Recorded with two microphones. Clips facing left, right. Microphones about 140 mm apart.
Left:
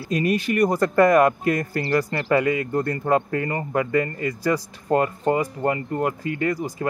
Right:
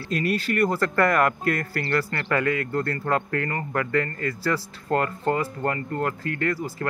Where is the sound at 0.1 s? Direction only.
20° left (ahead or behind).